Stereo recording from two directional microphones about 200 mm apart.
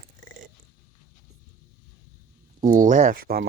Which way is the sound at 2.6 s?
40° right (ahead or behind).